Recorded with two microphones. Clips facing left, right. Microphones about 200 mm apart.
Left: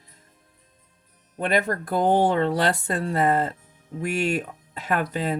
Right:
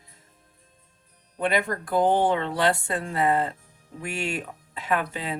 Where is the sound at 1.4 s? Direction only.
40° left (ahead or behind).